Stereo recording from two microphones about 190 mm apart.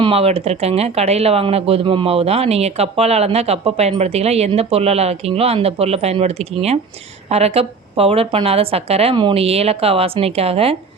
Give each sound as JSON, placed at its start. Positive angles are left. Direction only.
{"t": 0.0, "sound": "speech", "side_deg": -30}